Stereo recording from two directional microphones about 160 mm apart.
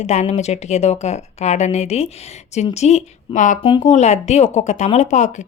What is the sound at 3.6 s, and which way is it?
Speech, 30° left (ahead or behind).